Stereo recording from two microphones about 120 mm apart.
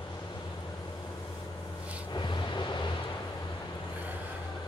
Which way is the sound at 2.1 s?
40° left (ahead or behind).